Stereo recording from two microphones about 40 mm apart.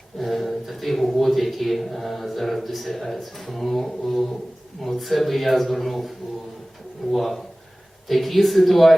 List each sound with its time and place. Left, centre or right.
0.2 s a man's voice: centre
7.1 s a man's voice: centre